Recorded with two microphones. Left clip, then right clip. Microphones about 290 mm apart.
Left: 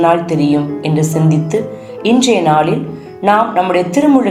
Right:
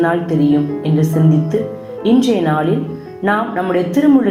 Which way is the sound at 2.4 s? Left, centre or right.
Left.